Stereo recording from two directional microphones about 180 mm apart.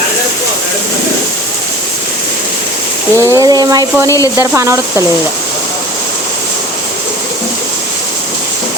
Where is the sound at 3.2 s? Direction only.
15° right (ahead or behind).